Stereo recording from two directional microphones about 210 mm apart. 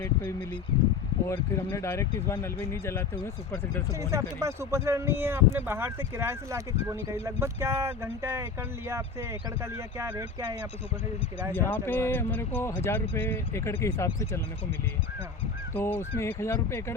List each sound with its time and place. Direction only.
0.0 s speech: 15° left (ahead or behind)
4.0 s speech: 15° right (ahead or behind)
10.0 s speech: 15° right (ahead or behind)
11.5 s speech: 10° left (ahead or behind)
15.7 s speech: 10° left (ahead or behind)